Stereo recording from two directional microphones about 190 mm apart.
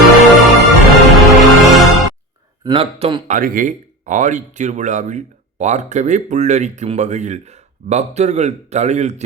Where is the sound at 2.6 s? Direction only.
25° right (ahead or behind).